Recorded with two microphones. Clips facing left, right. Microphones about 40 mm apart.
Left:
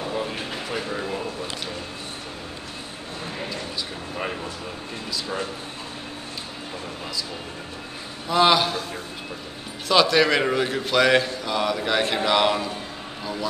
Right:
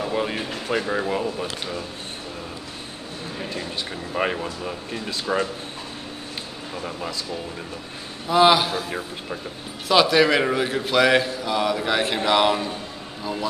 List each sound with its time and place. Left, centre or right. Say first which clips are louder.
0.1 s a sound: right 3 dB; right
0.7 s speech: right 6 dB; right
4.1 s speech: right 7 dB; right
8.3 s a man's voice: right 2 dB; centre
9.8 s a man's voice: right 1 dB; centre